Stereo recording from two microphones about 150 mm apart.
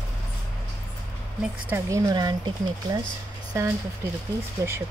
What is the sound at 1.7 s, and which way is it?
Speech, 20° right (ahead or behind).